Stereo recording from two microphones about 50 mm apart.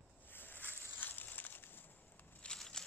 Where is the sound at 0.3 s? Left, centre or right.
Left.